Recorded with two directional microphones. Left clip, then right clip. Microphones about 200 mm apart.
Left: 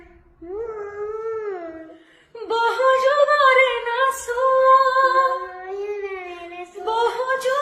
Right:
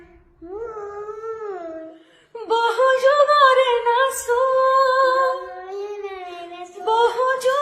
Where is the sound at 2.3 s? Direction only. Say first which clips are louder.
Right 1 dB; 30° right (ahead or behind).